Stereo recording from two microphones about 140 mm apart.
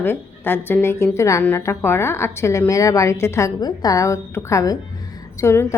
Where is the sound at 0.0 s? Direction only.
15° left (ahead or behind).